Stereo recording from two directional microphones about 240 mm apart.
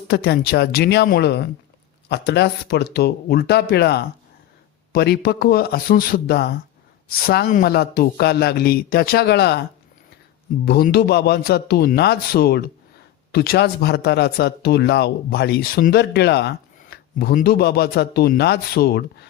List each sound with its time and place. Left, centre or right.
0.1 s speech: left
10.7 s speech: left